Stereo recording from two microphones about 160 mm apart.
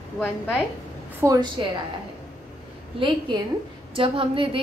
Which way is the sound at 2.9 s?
30° right (ahead or behind).